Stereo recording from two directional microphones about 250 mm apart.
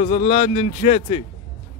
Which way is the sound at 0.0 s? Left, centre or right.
Left.